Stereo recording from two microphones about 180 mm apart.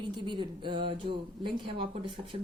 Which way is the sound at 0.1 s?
25° right (ahead or behind).